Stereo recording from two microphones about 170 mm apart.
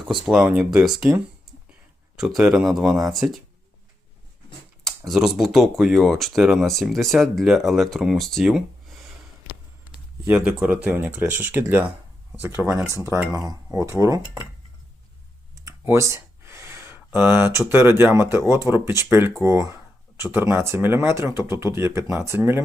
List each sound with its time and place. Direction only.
0.0 s speech: 5° right (ahead or behind)
2.1 s speech: 5° right (ahead or behind)
4.8 s speech: centre (ahead or behind)
10.2 s speech: 5° right (ahead or behind)
15.6 s a sound: 15° right (ahead or behind)
17.2 s speech: 10° right (ahead or behind)